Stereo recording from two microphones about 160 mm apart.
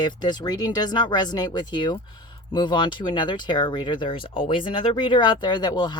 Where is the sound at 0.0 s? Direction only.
25° left (ahead or behind).